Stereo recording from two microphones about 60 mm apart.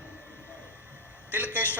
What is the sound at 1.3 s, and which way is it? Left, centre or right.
Speech, right.